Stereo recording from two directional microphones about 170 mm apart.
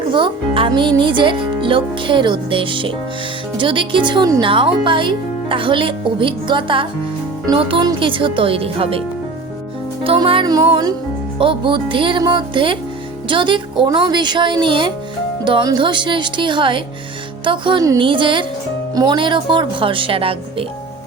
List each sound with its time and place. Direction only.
0.1 s speech: 30° right (ahead or behind)
10.0 s speech: 30° right (ahead or behind)